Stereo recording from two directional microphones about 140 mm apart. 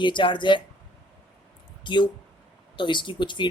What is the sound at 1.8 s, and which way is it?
Speech, 35° left (ahead or behind).